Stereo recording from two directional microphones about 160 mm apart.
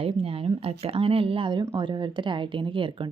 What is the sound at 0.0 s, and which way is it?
A woman's voice, 35° right (ahead or behind).